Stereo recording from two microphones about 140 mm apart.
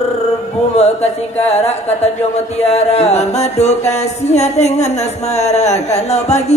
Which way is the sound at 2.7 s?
50° left (ahead or behind).